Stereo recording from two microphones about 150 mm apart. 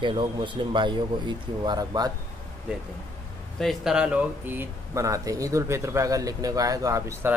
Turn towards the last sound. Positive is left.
turn(degrees=-20)  # may be behind; listen again after turning